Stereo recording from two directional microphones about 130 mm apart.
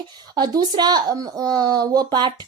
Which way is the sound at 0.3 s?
30° right (ahead or behind).